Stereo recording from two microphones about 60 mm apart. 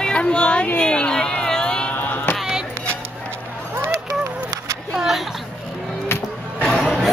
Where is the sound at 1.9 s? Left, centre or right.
Left.